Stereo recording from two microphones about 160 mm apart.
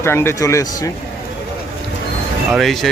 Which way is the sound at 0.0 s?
15° left (ahead or behind).